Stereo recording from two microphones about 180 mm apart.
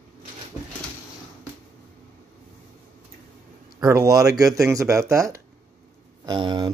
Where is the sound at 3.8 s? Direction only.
15° right (ahead or behind).